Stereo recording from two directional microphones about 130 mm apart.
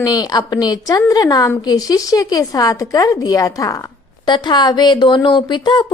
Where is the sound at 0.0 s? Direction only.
30° left (ahead or behind).